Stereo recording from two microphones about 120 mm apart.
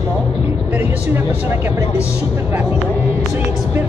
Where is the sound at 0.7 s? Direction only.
15° right (ahead or behind).